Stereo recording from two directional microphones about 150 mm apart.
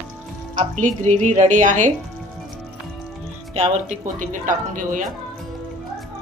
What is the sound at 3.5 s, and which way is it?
Speech, 45° right (ahead or behind).